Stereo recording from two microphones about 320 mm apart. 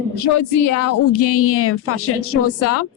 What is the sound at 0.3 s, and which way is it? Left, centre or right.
A woman's voice, left.